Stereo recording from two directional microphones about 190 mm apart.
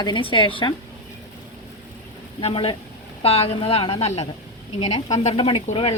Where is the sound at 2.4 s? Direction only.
30° left (ahead or behind).